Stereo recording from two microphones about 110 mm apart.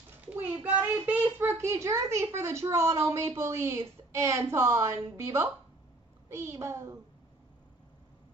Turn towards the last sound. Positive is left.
turn(degrees=-25)  # may be behind; listen again after turning